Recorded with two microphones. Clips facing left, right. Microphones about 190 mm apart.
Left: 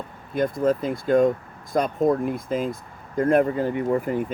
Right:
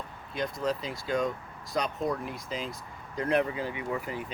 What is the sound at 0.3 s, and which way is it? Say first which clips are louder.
Speech: left 9 dB; 50° left (ahead or behind).